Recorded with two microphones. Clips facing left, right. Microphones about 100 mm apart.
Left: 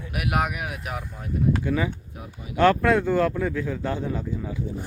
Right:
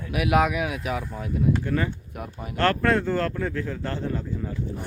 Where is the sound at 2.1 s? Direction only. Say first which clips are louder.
Right 4 dB; 55° right (ahead or behind).